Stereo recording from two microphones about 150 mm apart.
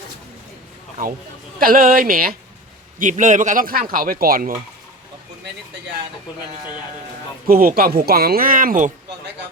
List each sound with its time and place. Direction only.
1.5 s speech: 70° right (ahead or behind)
3.0 s speech: 55° right (ahead or behind); by 4.5 s 70° right (ahead or behind)
7.4 s speech: 75° right (ahead or behind)